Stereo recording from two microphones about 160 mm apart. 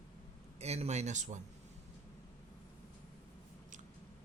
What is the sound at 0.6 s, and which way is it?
Speech, 40° right (ahead or behind).